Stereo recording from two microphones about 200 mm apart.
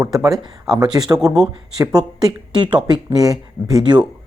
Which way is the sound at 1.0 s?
20° right (ahead or behind).